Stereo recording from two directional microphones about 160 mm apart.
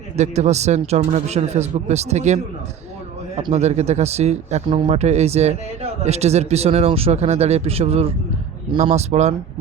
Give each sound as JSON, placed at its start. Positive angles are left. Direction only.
{"t": 0.2, "sound": "speech", "side_deg": -45}
{"t": 3.5, "sound": "speech", "side_deg": -45}